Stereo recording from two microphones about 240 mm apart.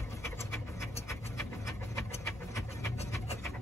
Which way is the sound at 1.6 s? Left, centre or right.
Centre.